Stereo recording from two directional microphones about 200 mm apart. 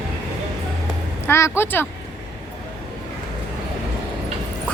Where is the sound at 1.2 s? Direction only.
15° left (ahead or behind).